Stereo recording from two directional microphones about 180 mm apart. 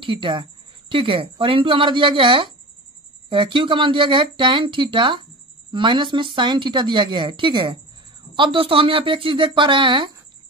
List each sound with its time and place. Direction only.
0.0 s speech: 30° right (ahead or behind)